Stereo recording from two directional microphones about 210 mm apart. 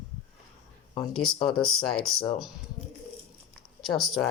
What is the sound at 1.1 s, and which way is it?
Speech, 5° left (ahead or behind).